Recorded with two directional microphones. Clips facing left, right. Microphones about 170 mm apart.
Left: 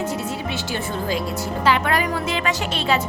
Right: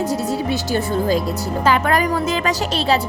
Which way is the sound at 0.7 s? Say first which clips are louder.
Right 6 dB; 40° right (ahead or behind).